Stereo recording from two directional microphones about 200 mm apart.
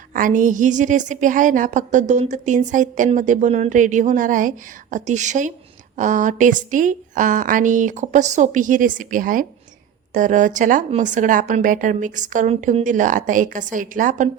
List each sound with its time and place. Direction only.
0.1 s a woman's voice: 40° right (ahead or behind)